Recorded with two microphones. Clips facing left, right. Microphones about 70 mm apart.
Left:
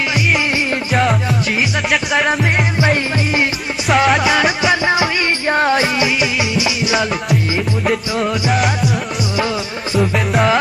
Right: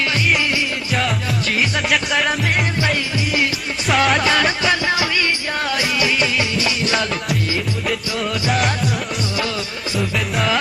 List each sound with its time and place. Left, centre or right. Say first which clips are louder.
1.9 s music: left 5 dB; centre
3.9 s music: left 3 dB; centre
4.2 s music: left 3 dB; centre
5.5 s music: left 7 dB; left
6.5 s music: left 3 dB; centre
8.5 s music: left 3 dB; centre
9.9 s music: left 6 dB; centre